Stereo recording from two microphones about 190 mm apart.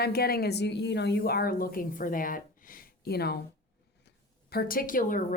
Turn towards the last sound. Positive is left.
turn(degrees=45)  # may be behind; listen again after turning